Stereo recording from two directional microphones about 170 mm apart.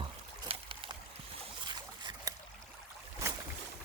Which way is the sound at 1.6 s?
25° right (ahead or behind).